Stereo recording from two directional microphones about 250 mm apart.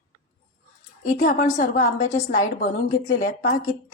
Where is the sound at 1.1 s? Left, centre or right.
Left.